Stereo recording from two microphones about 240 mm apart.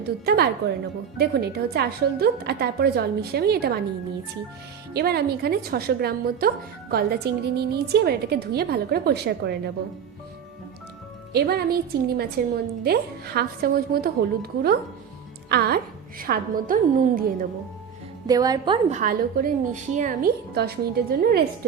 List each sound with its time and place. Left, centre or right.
0.3 s a woman's voice: right
4.9 s a woman's voice: right
11.3 s a woman's voice: right
18.3 s a woman's voice: centre; by 21.4 s right